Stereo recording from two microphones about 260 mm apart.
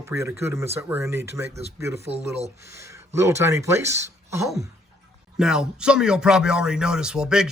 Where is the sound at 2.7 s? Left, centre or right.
Centre.